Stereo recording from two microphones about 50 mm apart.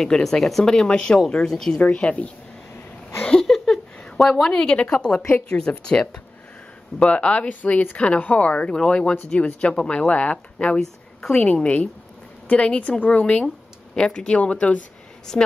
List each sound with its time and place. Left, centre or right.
0.0 s speech: centre
0.7 s speech: centre
1.8 s speech: left
3.3 s a sound: centre
5.5 s speech: centre
10.8 s a woman's voice: centre
11.4 s speech: left
15.3 s speech: centre